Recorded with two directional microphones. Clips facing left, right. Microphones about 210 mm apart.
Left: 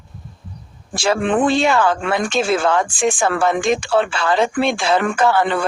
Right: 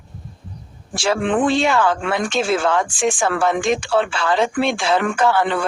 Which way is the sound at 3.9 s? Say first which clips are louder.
Left 1 dB; 45° left (ahead or behind).